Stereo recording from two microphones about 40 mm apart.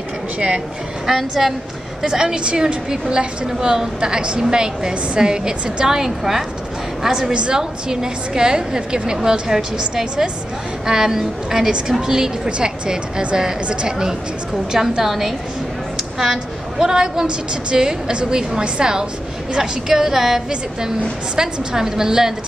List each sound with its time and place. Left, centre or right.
1.0 s a woman's voice: centre
12.1 s a woman's voice: right
19.9 s a woman's voice: centre